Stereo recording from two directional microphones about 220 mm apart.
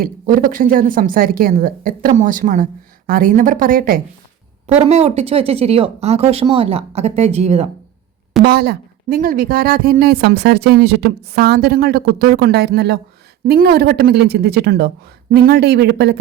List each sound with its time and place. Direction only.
0.0 s speech: 40° right (ahead or behind)
4.6 s speech: 30° right (ahead or behind)
8.4 s a woman's voice: 45° right (ahead or behind)